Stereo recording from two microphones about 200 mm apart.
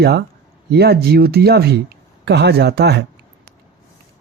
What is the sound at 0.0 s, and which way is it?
Speech, 55° right (ahead or behind).